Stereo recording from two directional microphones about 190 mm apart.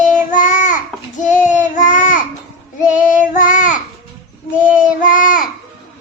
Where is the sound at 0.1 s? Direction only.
40° left (ahead or behind).